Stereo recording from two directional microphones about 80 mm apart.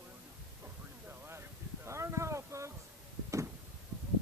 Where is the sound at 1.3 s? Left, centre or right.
Right.